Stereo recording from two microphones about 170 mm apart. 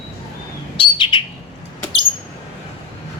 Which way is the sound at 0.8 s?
30° left (ahead or behind).